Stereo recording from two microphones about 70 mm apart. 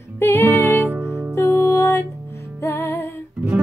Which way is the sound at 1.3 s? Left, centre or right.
Left.